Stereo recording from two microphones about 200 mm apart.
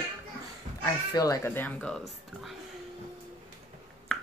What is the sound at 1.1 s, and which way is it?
Speech, 15° left (ahead or behind).